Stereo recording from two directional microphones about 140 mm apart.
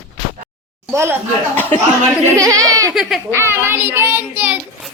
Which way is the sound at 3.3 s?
20° right (ahead or behind).